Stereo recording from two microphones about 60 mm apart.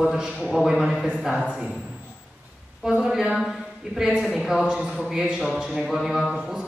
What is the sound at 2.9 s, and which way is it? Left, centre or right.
A woman's voice, centre.